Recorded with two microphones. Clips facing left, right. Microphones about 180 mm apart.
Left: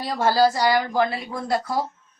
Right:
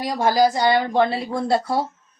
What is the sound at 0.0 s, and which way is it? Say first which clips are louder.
A woman's voice: right 1 dB; 15° right (ahead or behind).